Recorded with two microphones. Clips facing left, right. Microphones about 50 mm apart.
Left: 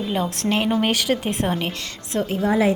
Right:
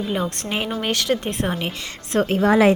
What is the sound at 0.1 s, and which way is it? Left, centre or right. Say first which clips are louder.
Speech: left 2 dB; centre.